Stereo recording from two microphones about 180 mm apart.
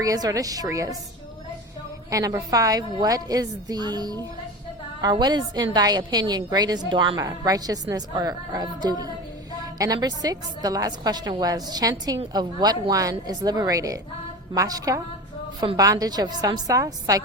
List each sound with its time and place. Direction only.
0.0 s a woman's voice: 20° right (ahead or behind)
2.0 s a woman's voice: 20° right (ahead or behind)